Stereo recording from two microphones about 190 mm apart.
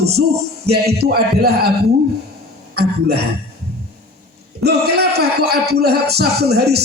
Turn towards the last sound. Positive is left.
turn(degrees=-60)  # may be behind; listen again after turning